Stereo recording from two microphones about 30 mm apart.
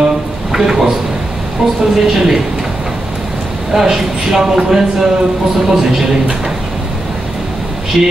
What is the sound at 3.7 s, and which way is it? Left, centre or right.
A man's voice, centre.